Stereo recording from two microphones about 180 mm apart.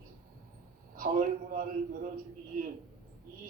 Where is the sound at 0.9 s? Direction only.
50° right (ahead or behind).